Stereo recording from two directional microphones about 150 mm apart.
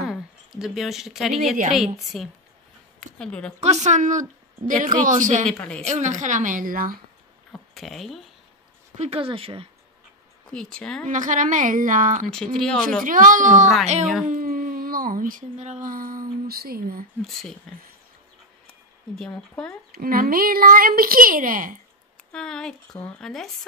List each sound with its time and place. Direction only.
0.0 s speech: centre (ahead or behind)
3.6 s a woman's voice: 50° right (ahead or behind)
5.5 s speech: 5° left (ahead or behind)
5.9 s a woman's voice: 50° right (ahead or behind); by 7.0 s 70° right (ahead or behind)
7.7 s speech: centre (ahead or behind)
8.9 s speech: 45° right (ahead or behind)
10.5 s speech: 5° left (ahead or behind)
11.1 s a woman's voice: 55° right (ahead or behind)
12.3 s speech: 5° left (ahead or behind)
13.0 s a woman's voice: 65° right (ahead or behind); by 17.0 s 90° right
17.3 s speech: centre (ahead or behind)
19.1 s speech: 5° left (ahead or behind)
19.9 s a woman's voice: 75° right (ahead or behind)
22.3 s speech: 5° left (ahead or behind)